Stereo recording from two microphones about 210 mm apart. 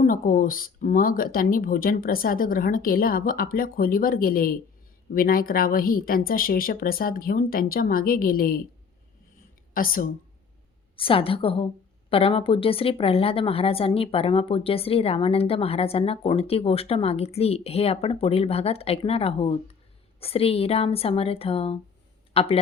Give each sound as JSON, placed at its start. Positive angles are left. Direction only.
{"t": 0.0, "sound": "speech", "side_deg": 40}
{"t": 9.7, "sound": "speech", "side_deg": 40}
{"t": 10.9, "sound": "a woman's voice", "side_deg": 25}